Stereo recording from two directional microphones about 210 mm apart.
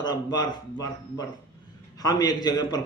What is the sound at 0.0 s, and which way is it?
A man's voice, 20° left (ahead or behind).